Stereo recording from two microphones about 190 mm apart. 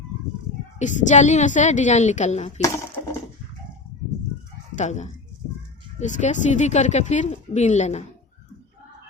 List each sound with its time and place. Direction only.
0.8 s speech: 40° left (ahead or behind)
2.6 s a sound: 15° left (ahead or behind)
4.8 s speech: 40° left (ahead or behind)